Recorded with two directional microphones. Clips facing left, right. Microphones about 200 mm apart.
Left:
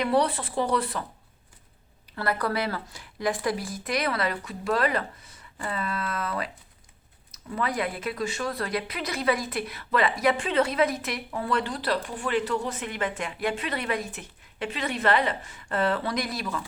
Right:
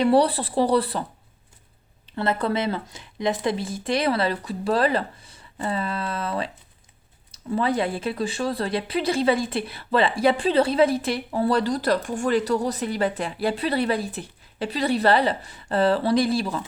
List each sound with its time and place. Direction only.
0.0 s speech: 30° right (ahead or behind)
2.0 s speech: 25° right (ahead or behind)